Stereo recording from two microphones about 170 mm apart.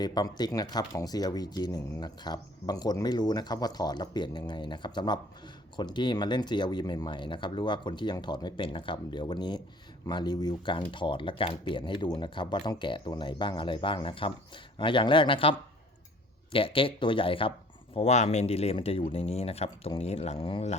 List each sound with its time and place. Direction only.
0.0 s speech: 25° left (ahead or behind)